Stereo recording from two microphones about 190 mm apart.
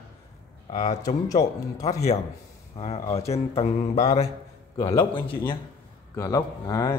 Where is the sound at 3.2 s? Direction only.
35° left (ahead or behind).